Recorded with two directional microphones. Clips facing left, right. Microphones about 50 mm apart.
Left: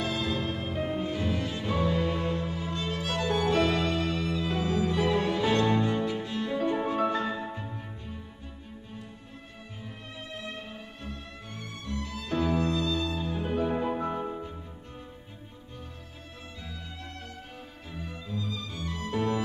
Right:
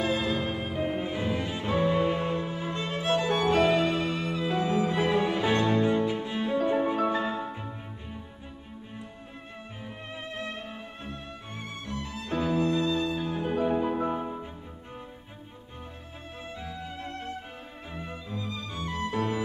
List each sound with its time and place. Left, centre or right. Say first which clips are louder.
0.0 s music: right 3 dB; right
11.1 s music: right 2 dB; right
13.4 s music: right 2 dB; centre
16.5 s music: right 6 dB; right